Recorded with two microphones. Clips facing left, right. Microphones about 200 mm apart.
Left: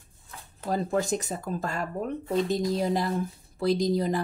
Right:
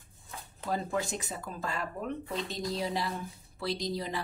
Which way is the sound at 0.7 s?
40° left (ahead or behind).